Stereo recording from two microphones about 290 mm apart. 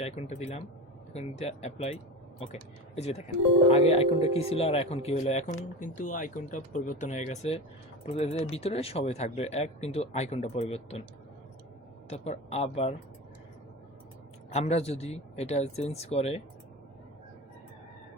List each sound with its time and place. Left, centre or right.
0.0 s speech: left
12.0 s speech: left
14.5 s speech: left